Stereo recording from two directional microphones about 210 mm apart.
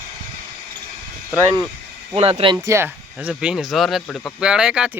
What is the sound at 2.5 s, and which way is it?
Speech, 10° right (ahead or behind).